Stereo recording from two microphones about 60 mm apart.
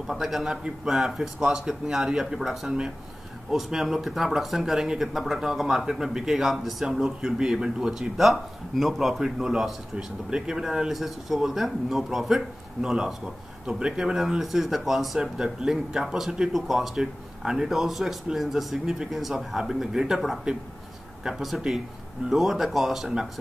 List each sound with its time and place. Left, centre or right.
0.0 s speech: centre